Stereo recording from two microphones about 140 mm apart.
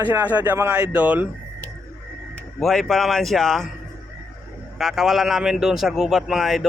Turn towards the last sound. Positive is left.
turn(degrees=0)  # may be behind; listen again after turning